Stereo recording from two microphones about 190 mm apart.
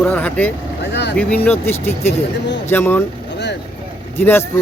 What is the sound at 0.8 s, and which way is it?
Vehicle, 65° left (ahead or behind).